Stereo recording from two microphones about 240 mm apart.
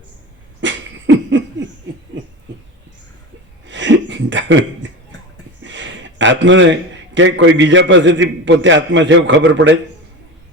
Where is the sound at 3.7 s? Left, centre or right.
Right.